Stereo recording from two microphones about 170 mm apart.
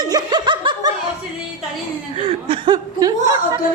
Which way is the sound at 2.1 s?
35° right (ahead or behind).